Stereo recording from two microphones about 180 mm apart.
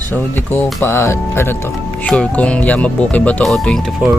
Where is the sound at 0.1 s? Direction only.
10° left (ahead or behind).